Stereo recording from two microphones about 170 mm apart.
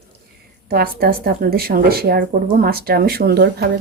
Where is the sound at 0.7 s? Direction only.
60° right (ahead or behind).